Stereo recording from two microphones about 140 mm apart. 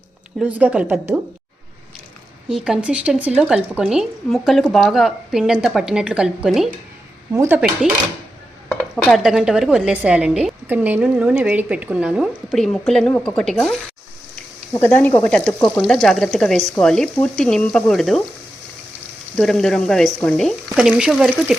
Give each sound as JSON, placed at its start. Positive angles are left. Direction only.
{"t": 0.3, "sound": "a woman's voice", "side_deg": -10}
{"t": 2.5, "sound": "a woman's voice", "side_deg": -5}
{"t": 7.3, "sound": "a woman's voice", "side_deg": -15}
{"t": 9.0, "sound": "a woman's voice", "side_deg": 0}
{"t": 14.8, "sound": "a woman's voice", "side_deg": 15}
{"t": 19.4, "sound": "a woman's voice", "side_deg": 5}